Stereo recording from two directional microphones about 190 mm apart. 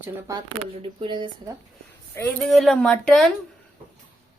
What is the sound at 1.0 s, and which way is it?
Speech, 25° right (ahead or behind).